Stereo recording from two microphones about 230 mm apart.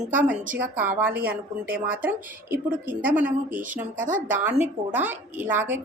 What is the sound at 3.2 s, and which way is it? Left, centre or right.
Speech, centre.